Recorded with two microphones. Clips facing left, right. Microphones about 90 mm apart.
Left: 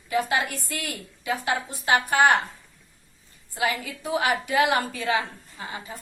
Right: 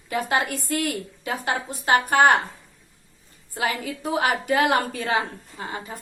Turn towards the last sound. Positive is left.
turn(degrees=-45)  # may be behind; listen again after turning